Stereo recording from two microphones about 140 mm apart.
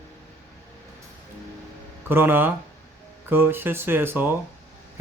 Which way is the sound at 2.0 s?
15° right (ahead or behind).